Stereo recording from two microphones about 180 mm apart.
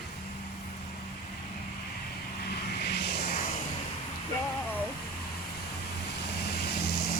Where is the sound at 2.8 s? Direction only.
65° left (ahead or behind).